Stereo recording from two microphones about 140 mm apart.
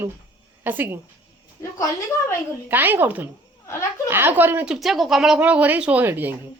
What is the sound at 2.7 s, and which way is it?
Speech, 15° right (ahead or behind).